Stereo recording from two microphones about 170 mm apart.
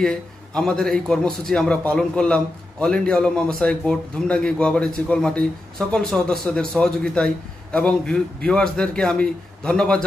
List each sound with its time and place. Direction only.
0.6 s a man's voice: 5° left (ahead or behind)